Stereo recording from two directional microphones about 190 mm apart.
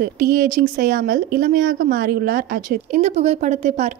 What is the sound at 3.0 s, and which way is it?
Speech, 35° right (ahead or behind).